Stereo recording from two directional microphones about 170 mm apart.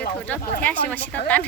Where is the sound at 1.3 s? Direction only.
10° left (ahead or behind).